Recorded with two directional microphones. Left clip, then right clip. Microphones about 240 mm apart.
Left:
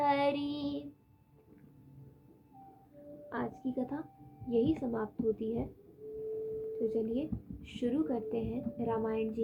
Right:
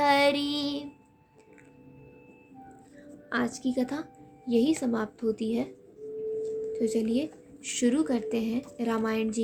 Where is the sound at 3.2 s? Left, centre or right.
Right.